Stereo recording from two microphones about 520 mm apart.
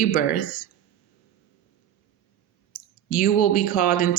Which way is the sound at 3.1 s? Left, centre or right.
Centre.